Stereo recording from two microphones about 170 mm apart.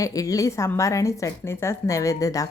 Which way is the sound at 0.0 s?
20° left (ahead or behind).